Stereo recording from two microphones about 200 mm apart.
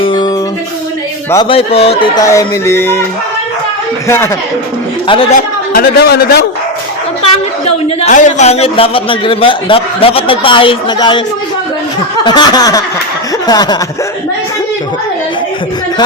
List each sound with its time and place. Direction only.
0.0 s music: 25° left (ahead or behind)
1.3 s a sound: 25° left (ahead or behind)
5.0 s a man's voice: 25° left (ahead or behind)
5.7 s a man's voice: 50° left (ahead or behind)
7.9 s a man's voice: 35° left (ahead or behind)
12.2 s a man's voice: 20° left (ahead or behind)